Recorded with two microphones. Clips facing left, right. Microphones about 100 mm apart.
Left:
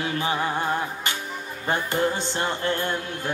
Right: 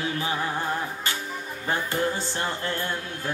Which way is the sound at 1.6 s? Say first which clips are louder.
Left 2 dB; 20° left (ahead or behind).